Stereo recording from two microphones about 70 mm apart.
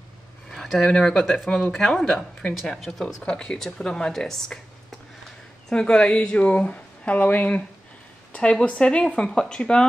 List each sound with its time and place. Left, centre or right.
0.5 s speech: centre
3.2 s speech: centre
5.7 s speech: centre